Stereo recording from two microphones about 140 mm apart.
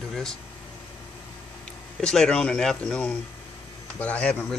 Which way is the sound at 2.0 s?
5° left (ahead or behind).